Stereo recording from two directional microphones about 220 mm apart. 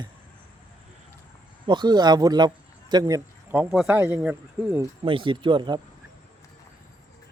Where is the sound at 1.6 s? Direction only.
20° right (ahead or behind).